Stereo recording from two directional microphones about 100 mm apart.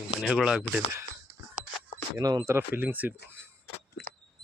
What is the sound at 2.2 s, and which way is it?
Speech, 35° right (ahead or behind).